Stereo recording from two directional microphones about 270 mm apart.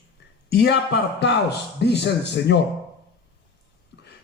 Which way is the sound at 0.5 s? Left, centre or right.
Left.